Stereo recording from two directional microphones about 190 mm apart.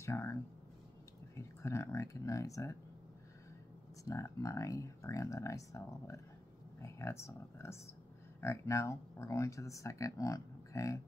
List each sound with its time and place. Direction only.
0.0 s a sound: 15° left (ahead or behind)
1.3 s speech: 15° left (ahead or behind)
4.0 s speech: 15° left (ahead or behind)